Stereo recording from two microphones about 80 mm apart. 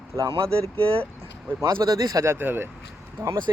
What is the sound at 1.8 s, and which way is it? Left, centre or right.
Speech, right.